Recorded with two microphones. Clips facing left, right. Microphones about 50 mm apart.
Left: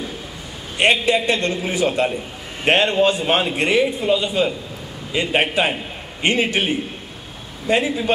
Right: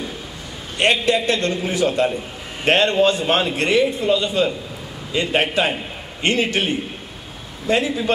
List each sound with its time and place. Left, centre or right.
0.7 s a man's voice: centre